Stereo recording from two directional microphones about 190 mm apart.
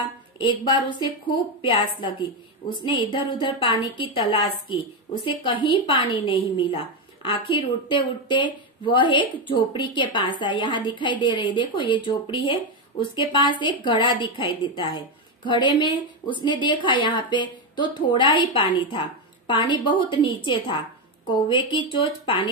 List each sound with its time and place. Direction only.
0.4 s a woman's voice: 25° left (ahead or behind)
7.2 s a woman's voice: 25° left (ahead or behind)